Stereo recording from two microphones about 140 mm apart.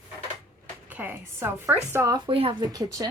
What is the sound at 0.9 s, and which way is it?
A woman's voice, 15° right (ahead or behind).